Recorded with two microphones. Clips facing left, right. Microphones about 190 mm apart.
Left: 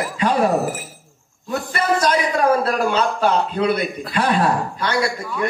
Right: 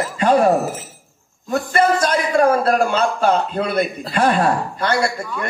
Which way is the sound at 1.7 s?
50° right (ahead or behind).